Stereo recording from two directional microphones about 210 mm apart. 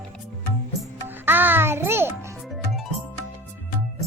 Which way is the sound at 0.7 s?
10° right (ahead or behind).